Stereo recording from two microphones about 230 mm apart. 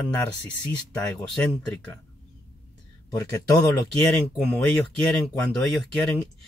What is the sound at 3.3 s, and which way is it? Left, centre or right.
Speech, centre.